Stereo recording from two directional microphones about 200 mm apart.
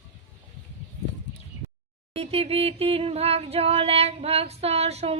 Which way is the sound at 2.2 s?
30° right (ahead or behind).